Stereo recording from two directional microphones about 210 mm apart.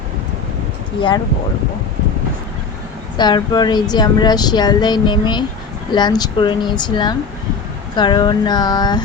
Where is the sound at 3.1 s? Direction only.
20° left (ahead or behind).